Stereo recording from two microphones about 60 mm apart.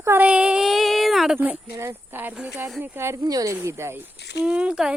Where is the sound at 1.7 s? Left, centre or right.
Right.